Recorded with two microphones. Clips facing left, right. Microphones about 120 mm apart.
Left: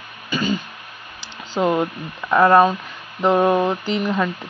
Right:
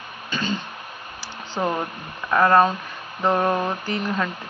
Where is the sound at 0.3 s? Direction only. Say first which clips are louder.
Left 5 dB; 10° left (ahead or behind).